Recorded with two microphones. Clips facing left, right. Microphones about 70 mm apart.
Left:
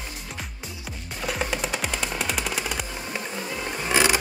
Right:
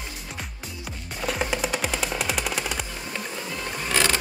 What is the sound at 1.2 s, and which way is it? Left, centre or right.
Music, centre.